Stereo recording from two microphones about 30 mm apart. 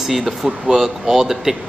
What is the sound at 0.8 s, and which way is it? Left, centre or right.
Speech, centre.